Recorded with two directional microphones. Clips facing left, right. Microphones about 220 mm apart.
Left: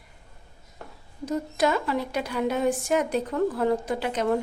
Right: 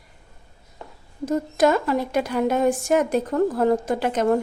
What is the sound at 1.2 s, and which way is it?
A woman's voice, 50° right (ahead or behind).